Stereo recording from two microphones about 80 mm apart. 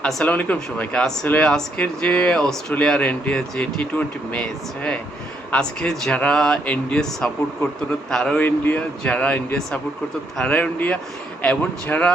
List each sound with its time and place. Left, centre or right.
0.0 s speech: centre